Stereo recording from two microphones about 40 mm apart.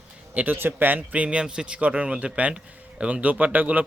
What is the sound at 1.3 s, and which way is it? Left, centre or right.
A man's voice, right.